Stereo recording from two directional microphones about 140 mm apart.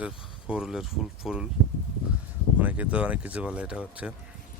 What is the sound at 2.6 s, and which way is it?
Speech, 10° right (ahead or behind).